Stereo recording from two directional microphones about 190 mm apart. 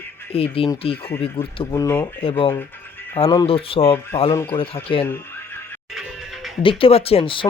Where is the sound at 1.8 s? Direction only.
15° left (ahead or behind).